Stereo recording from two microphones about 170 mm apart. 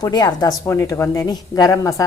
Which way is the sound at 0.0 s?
25° left (ahead or behind).